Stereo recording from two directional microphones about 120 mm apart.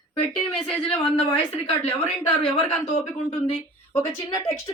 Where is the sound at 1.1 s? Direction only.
55° left (ahead or behind).